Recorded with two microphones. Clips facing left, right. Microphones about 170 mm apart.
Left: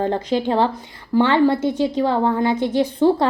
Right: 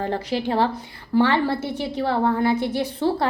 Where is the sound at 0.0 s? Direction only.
20° left (ahead or behind).